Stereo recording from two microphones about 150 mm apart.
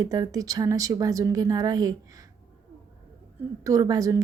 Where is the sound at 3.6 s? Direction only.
25° right (ahead or behind).